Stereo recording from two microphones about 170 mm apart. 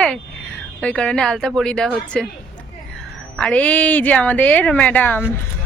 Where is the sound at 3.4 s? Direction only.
5° left (ahead or behind).